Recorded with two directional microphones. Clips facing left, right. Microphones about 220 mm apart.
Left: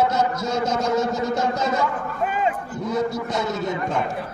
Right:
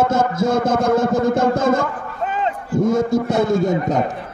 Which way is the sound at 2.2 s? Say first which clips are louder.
Right 1 dB; 10° left (ahead or behind).